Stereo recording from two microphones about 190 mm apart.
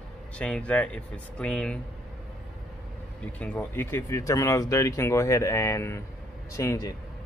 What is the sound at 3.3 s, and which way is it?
Speech, 10° left (ahead or behind).